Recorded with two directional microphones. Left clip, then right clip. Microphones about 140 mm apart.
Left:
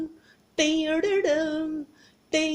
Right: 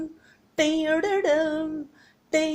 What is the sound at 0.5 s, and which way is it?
Music, 20° left (ahead or behind).